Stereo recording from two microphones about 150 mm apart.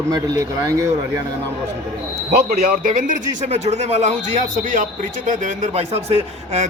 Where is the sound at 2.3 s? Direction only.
90° right; by 2.9 s 75° right (ahead or behind).